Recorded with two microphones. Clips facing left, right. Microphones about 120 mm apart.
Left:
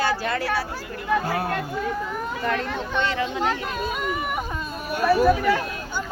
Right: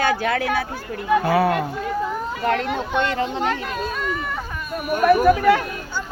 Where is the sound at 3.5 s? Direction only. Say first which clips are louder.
Right 1 dB; 10° left (ahead or behind).